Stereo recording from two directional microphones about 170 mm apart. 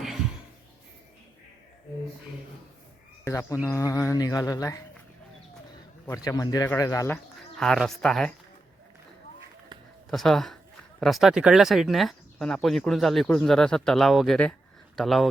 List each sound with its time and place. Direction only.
3.2 s speech: 15° left (ahead or behind)
3.7 s mantra: 20° left (ahead or behind)
6.2 s mantra: 20° left (ahead or behind)
7.5 s speech: 5° left (ahead or behind)
10.1 s speech: centre (ahead or behind)